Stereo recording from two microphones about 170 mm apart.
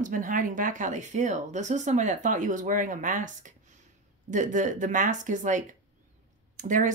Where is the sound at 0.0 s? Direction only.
50° right (ahead or behind).